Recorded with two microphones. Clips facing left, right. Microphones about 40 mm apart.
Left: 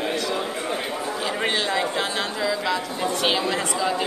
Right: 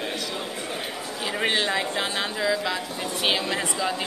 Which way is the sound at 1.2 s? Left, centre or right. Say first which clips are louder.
Right 1 dB; centre.